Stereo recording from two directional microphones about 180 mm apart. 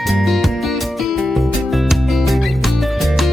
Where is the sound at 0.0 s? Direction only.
Centre (ahead or behind).